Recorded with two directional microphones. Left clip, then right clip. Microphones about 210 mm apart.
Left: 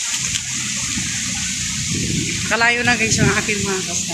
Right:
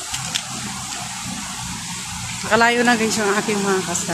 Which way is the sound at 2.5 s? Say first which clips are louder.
Right 1 dB; 20° right (ahead or behind).